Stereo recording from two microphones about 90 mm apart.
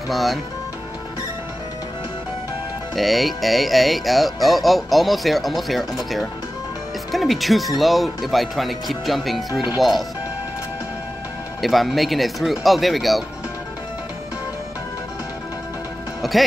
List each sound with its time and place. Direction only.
0.1 s speech: centre (ahead or behind)
3.0 s speech: centre (ahead or behind)
9.5 s speech: 50° left (ahead or behind)
9.8 s speech: centre (ahead or behind)
11.6 s speech: centre (ahead or behind)
16.2 s speech: centre (ahead or behind)